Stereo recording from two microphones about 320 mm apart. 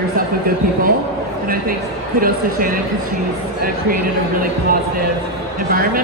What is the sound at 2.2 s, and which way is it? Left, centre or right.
Speech, right.